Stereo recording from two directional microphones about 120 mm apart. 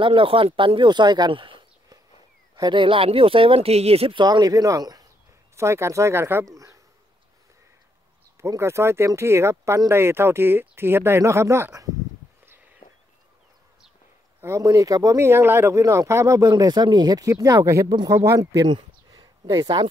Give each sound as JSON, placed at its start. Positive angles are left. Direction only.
{"t": 0.0, "sound": "speech", "side_deg": -45}
{"t": 4.2, "sound": "speech", "side_deg": -35}
{"t": 8.4, "sound": "speech", "side_deg": -25}
{"t": 14.4, "sound": "speech", "side_deg": -25}